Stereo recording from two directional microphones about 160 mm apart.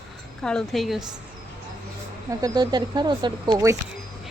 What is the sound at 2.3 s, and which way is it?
Speech, 20° right (ahead or behind).